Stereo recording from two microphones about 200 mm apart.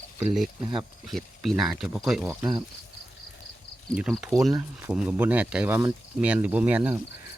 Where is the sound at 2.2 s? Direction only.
20° right (ahead or behind).